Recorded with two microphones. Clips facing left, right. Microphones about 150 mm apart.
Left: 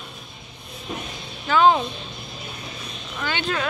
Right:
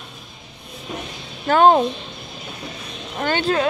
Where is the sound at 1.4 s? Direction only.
50° right (ahead or behind).